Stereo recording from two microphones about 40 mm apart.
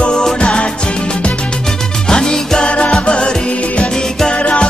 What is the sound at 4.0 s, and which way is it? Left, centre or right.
Music, centre.